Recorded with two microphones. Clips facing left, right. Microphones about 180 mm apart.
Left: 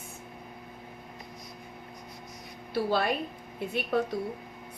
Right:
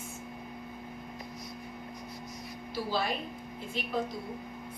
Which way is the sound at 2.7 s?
60° left (ahead or behind).